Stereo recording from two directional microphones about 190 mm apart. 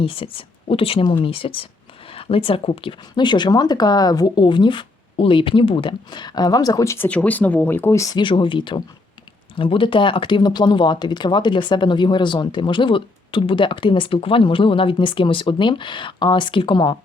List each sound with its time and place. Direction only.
0.0 s speech: 30° left (ahead or behind)